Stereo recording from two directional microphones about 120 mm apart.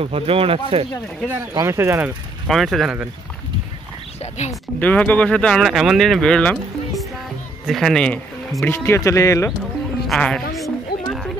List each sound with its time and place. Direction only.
0.0 s speech: 50° right (ahead or behind)
1.5 s speech: 25° right (ahead or behind)
2.4 s speech: centre (ahead or behind)
4.2 s speech: 65° left (ahead or behind)
4.7 s speech: 10° left (ahead or behind)
8.6 s speech: 20° left (ahead or behind)
10.0 s a woman's voice: 5° left (ahead or behind)